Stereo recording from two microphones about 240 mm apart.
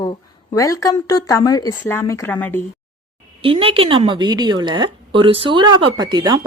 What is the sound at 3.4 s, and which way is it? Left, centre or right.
A woman's voice, right.